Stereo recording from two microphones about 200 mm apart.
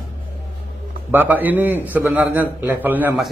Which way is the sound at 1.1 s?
10° right (ahead or behind).